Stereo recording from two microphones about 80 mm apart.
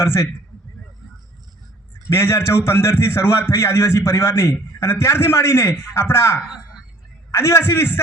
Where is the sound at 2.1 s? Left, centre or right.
Left.